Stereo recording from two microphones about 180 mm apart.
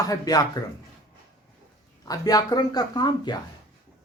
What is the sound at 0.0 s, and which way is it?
Speech, 20° left (ahead or behind).